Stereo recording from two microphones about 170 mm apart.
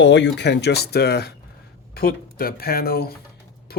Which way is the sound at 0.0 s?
90° left.